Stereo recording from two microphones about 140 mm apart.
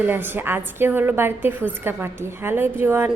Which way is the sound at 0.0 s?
15° right (ahead or behind).